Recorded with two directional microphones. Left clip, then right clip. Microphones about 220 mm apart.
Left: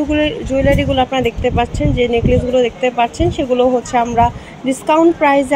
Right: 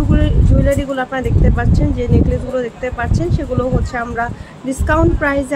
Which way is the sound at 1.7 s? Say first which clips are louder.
Left 3 dB; 30° right (ahead or behind).